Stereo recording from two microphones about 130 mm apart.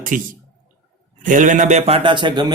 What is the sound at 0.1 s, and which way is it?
A man's voice, 90° right.